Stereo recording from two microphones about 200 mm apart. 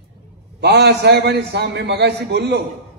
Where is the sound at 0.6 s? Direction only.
55° right (ahead or behind).